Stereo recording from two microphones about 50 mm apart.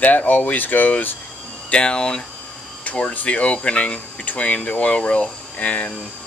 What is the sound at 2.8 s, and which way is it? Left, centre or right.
Speech, left.